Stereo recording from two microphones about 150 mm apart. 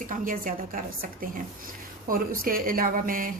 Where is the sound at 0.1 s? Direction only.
65° right (ahead or behind).